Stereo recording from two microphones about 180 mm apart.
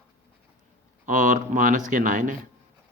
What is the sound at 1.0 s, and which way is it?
Speech, 45° right (ahead or behind).